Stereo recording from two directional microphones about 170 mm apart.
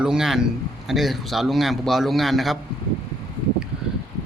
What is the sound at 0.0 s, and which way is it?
A man's voice, 5° right (ahead or behind).